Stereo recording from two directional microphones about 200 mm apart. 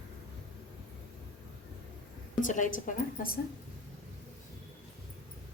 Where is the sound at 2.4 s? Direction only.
40° left (ahead or behind).